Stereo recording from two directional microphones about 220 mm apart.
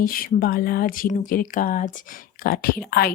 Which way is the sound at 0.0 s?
40° left (ahead or behind).